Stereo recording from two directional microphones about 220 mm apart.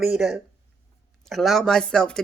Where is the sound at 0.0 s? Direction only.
Centre (ahead or behind).